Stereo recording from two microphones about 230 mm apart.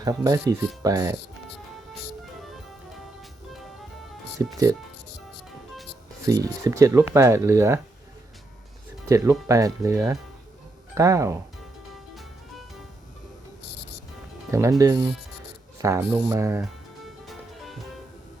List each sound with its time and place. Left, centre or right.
0.0 s speech: centre
4.4 s speech: centre
6.2 s speech: centre
9.0 s speech: centre
14.5 s speech: centre
17.0 s music: centre